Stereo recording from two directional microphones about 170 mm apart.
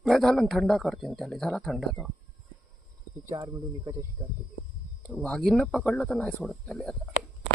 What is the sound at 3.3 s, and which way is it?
Speech, 30° right (ahead or behind).